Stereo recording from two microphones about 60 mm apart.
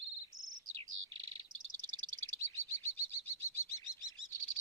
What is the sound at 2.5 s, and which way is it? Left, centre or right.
Chirp, left.